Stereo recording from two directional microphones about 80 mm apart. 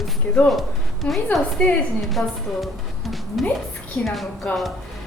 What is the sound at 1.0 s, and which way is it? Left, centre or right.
A woman's voice, centre.